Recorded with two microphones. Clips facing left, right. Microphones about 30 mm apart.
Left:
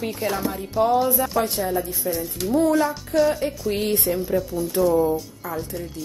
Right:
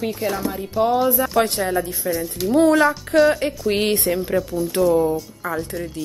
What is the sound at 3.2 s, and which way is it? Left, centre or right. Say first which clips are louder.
Speech: right 4 dB; right.